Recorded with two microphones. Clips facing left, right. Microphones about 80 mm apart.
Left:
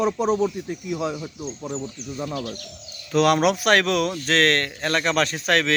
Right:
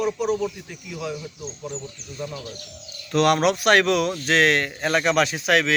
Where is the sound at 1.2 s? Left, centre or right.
Left.